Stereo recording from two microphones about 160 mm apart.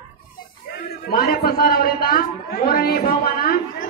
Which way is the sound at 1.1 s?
70° left (ahead or behind).